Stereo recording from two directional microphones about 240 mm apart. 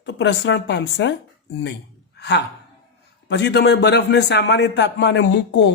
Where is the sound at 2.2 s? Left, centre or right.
Left.